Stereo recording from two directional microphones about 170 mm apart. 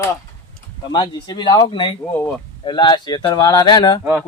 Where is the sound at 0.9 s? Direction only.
25° left (ahead or behind).